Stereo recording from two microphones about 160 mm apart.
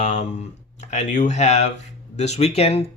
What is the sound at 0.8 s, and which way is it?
Speech, 45° left (ahead or behind).